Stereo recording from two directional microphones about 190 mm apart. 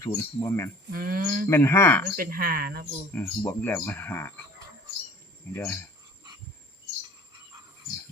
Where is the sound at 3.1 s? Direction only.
10° left (ahead or behind).